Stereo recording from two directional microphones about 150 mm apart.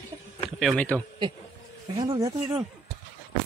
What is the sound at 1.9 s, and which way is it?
Speech, 25° right (ahead or behind).